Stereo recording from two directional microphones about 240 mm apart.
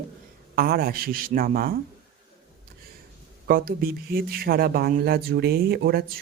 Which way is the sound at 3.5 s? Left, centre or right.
Right.